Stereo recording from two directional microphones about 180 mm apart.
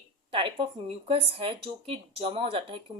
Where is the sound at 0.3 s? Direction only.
30° right (ahead or behind).